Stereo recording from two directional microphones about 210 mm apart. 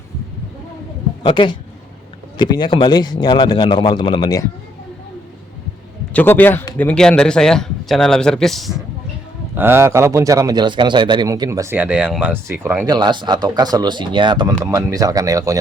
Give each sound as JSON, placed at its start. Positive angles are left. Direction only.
{"t": 1.2, "sound": "speech", "side_deg": 20}
{"t": 6.1, "sound": "a man's voice", "side_deg": 10}
{"t": 9.6, "sound": "a man's voice", "side_deg": -10}